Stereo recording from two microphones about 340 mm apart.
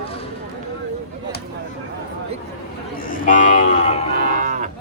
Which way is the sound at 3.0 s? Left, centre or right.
Left.